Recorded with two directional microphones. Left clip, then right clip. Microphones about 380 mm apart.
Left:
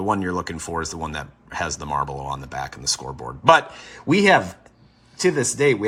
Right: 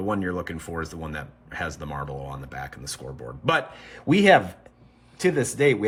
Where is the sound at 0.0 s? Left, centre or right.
Centre.